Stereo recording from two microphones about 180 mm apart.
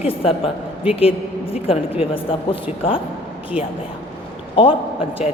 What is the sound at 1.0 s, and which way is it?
A woman's voice, 30° left (ahead or behind).